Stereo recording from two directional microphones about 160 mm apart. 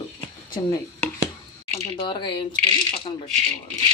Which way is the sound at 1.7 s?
30° left (ahead or behind).